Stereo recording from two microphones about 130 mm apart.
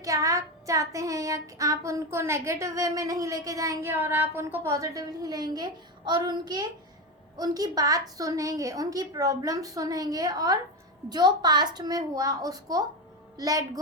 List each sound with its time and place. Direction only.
0.0 s child singing: 25° right (ahead or behind)